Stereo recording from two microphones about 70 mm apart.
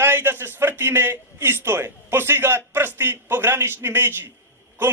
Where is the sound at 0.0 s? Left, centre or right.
Right.